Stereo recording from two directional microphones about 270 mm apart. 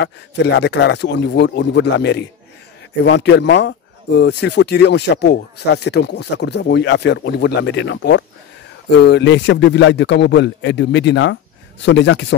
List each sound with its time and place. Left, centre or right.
0.0 s speech: left